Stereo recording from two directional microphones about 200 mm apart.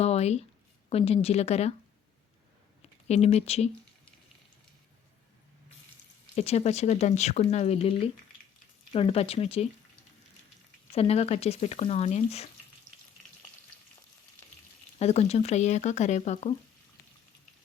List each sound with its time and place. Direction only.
0.0 s speech: 30° left (ahead or behind)
3.1 s speech: 30° left (ahead or behind)
6.3 s speech: 30° left (ahead or behind)
10.9 s speech: 30° left (ahead or behind)
14.9 s speech: 30° left (ahead or behind)